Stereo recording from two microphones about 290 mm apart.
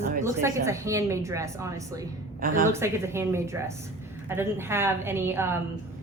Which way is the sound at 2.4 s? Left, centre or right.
Right.